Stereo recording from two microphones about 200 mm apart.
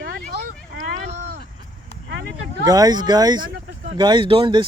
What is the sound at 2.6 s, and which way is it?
Speech, 20° right (ahead or behind).